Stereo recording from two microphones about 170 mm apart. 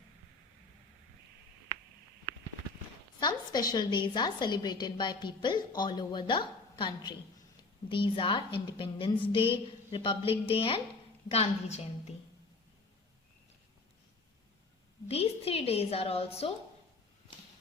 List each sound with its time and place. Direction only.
3.2 s a woman's voice: 25° left (ahead or behind)
15.0 s a woman's voice: 35° left (ahead or behind)